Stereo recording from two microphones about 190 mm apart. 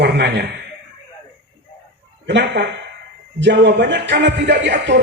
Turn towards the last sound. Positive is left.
turn(degrees=-65)  # may be behind; listen again after turning